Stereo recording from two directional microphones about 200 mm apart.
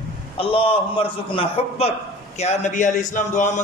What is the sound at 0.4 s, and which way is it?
A man's voice, 30° left (ahead or behind).